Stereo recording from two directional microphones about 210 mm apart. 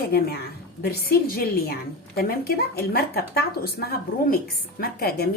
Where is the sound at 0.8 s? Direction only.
45° left (ahead or behind).